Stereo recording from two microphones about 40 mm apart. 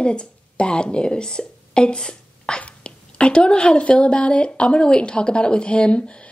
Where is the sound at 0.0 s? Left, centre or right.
Left.